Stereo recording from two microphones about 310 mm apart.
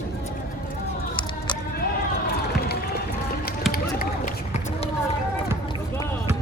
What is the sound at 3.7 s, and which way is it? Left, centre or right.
Run, left.